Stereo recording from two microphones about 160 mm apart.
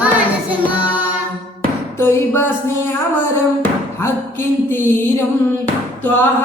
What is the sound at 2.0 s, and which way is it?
Music, 15° left (ahead or behind).